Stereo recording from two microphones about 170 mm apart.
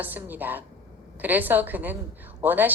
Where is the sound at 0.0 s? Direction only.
10° right (ahead or behind).